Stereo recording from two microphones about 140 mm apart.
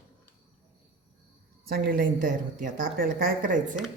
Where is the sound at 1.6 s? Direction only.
90° right.